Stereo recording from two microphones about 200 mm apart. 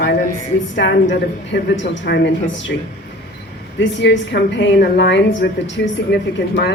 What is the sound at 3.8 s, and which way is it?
A woman's voice, 65° left (ahead or behind).